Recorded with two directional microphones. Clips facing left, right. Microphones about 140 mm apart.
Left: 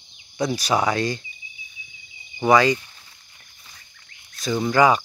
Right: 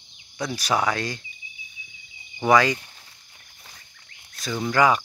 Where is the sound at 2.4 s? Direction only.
5° left (ahead or behind).